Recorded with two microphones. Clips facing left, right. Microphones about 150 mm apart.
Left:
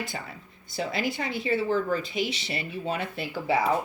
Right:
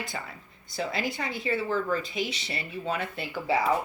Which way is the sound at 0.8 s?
30° left (ahead or behind).